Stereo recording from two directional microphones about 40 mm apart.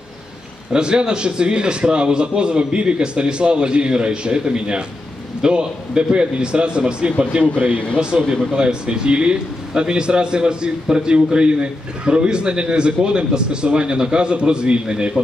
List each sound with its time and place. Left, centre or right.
0.7 s a man's voice: right